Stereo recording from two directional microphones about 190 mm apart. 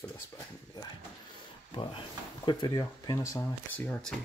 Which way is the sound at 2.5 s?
25° left (ahead or behind).